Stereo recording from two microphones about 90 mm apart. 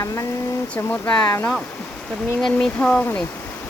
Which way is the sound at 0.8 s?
20° left (ahead or behind).